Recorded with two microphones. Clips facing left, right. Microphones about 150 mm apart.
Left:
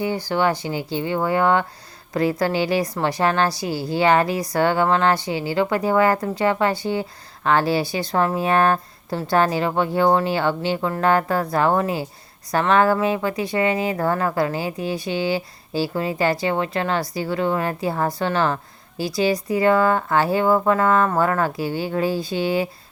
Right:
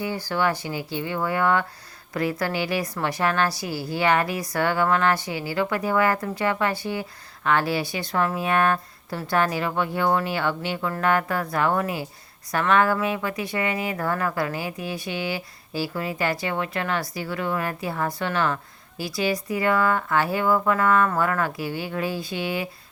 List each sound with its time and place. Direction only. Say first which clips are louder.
0.3 s speech: left 2 dB; 30° left (ahead or behind)